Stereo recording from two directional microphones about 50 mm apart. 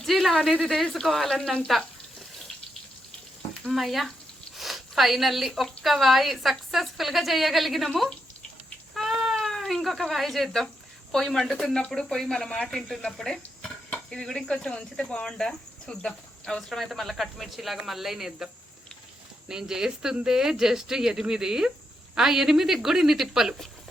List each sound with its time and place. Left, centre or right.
0.0 s a sound: centre
0.7 s speech: centre
3.7 s speech: centre
9.0 s cat: centre
9.4 s speech: centre
13.1 s dishes: centre
14.3 s speech: centre